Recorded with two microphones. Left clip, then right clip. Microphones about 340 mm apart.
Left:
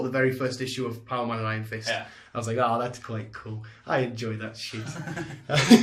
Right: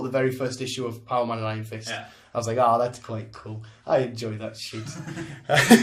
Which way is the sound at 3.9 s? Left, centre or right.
Centre.